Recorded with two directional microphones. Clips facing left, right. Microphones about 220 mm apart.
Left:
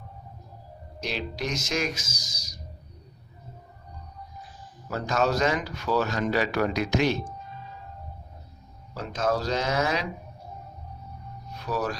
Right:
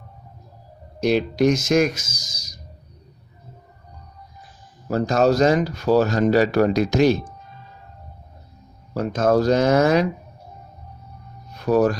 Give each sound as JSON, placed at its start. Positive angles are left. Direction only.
{"t": 1.0, "sound": "speech", "side_deg": -50}
{"t": 2.0, "sound": "speech", "side_deg": -20}
{"t": 4.9, "sound": "speech", "side_deg": -40}
{"t": 9.0, "sound": "speech", "side_deg": -50}
{"t": 11.5, "sound": "speech", "side_deg": -50}